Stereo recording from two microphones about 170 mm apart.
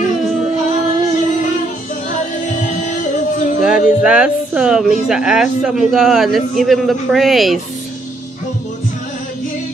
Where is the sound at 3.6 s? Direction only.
5° right (ahead or behind).